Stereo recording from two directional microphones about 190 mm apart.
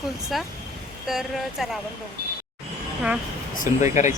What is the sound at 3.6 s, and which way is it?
Speech, 40° left (ahead or behind).